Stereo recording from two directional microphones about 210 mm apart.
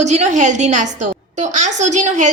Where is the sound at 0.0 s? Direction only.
35° right (ahead or behind).